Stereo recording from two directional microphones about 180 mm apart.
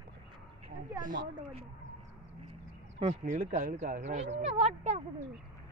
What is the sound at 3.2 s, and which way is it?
Speech, 55° right (ahead or behind).